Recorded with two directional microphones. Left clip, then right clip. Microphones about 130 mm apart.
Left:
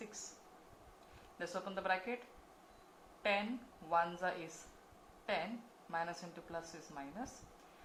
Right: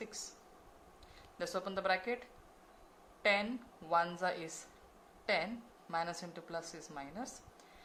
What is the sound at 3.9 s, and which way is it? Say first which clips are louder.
Speech: right 2 dB; 90° right.